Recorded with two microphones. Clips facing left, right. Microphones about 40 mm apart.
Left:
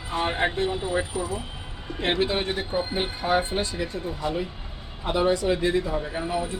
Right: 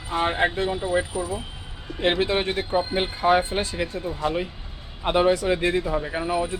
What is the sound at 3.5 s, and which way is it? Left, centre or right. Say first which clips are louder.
Speech: right 1 dB; right.